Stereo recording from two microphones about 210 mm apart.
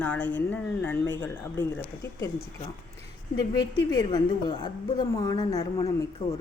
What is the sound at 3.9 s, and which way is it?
A woman's voice, 20° left (ahead or behind).